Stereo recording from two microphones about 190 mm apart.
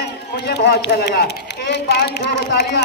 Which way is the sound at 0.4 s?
60° left (ahead or behind).